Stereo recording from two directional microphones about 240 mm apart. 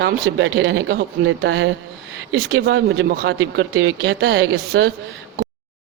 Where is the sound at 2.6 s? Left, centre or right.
Right.